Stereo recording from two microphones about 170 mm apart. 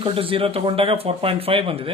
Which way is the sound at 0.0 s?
30° right (ahead or behind).